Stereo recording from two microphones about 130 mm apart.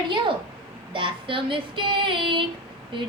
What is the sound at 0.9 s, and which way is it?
A woman's voice, 40° right (ahead or behind).